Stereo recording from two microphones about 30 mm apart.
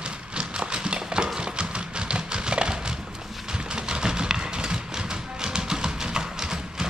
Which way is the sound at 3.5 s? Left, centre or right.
Right.